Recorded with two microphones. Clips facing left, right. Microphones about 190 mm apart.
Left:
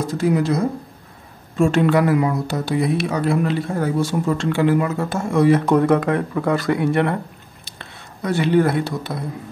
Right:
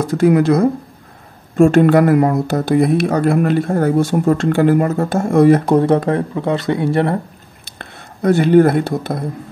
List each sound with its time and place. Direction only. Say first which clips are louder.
0.2 s speech: right 7 dB; 60° right (ahead or behind)
1.6 s speech: right 6 dB; 50° right (ahead or behind)
5.7 s speech: right 3 dB; 30° right (ahead or behind)
7.6 s speech: right 5 dB; 50° right (ahead or behind)